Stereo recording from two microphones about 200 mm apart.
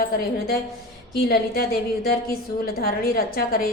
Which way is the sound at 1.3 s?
50° left (ahead or behind).